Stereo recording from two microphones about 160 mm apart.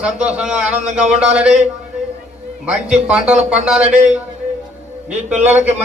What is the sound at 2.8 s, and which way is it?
Speech, 5° right (ahead or behind).